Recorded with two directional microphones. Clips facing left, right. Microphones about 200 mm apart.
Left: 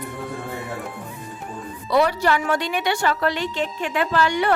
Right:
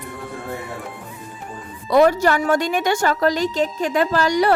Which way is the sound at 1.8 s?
45° right (ahead or behind).